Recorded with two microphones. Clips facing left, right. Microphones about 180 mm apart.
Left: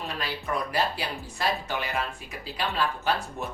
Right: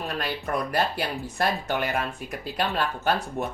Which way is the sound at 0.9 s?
60° right (ahead or behind).